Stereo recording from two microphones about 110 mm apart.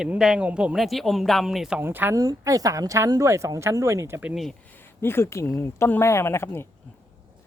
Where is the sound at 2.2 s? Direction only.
35° right (ahead or behind).